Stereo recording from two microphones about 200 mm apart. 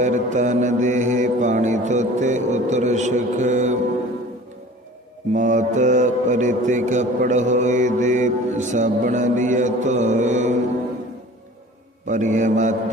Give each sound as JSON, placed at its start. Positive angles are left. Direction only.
{"t": 0.0, "sound": "mantra", "side_deg": -40}
{"t": 5.3, "sound": "mantra", "side_deg": -40}
{"t": 12.0, "sound": "mantra", "side_deg": -40}